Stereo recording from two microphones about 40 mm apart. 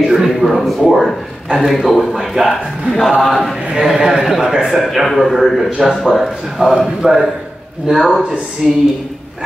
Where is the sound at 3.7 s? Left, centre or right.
Centre.